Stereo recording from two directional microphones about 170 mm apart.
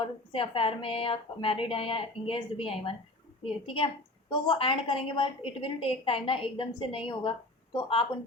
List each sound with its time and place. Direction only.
0.0 s a woman's voice: 30° left (ahead or behind)